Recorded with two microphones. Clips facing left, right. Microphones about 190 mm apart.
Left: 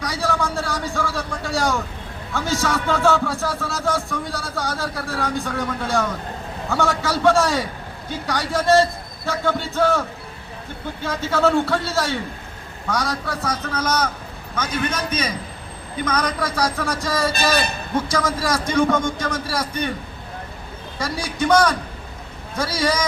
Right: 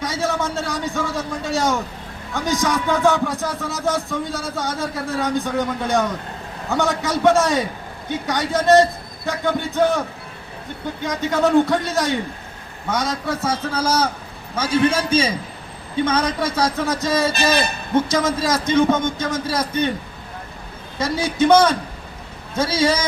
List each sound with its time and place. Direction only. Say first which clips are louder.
0.0 s a sound: right 1 dB; 25° right (ahead or behind)
2.3 s speech: right 2 dB; 15° right (ahead or behind)
11.0 s a man's voice: even; 20° right (ahead or behind)
21.0 s speech: right 5 dB; 25° right (ahead or behind)